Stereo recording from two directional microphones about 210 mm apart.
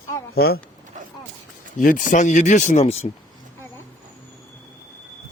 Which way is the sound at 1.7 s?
40° left (ahead or behind).